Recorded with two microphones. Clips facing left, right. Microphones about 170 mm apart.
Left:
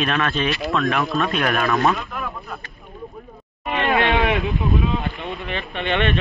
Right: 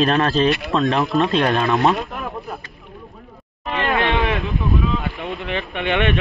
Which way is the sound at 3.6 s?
Centre (ahead or behind).